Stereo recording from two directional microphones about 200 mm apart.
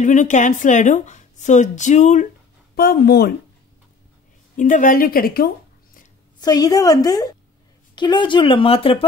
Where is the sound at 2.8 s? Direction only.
50° left (ahead or behind).